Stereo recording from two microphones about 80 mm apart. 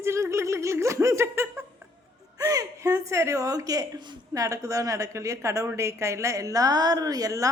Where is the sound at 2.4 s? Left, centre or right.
Right.